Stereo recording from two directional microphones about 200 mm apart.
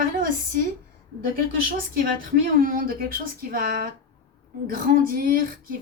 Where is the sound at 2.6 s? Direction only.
45° right (ahead or behind).